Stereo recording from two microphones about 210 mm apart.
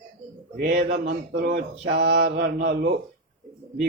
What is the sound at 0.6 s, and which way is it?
Mantra, 40° right (ahead or behind).